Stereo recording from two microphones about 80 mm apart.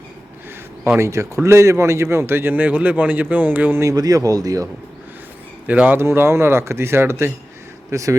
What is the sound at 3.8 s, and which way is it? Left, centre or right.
Speech, right.